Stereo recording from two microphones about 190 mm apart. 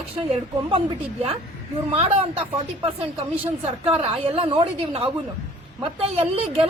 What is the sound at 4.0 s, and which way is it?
A woman's voice, 30° right (ahead or behind).